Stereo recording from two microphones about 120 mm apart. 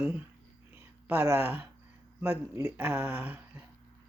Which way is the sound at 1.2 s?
20° right (ahead or behind).